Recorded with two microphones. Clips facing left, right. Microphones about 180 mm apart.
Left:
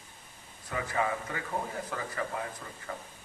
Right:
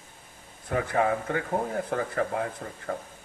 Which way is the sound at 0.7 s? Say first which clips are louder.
Right 6 dB; 60° right (ahead or behind).